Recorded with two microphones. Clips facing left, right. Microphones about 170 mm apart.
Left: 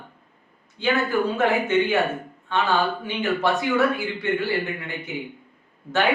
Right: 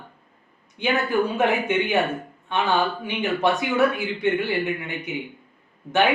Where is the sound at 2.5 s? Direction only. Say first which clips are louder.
Even; 20° right (ahead or behind).